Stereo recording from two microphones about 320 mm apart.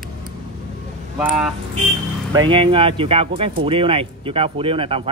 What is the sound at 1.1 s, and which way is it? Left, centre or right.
Speech, centre.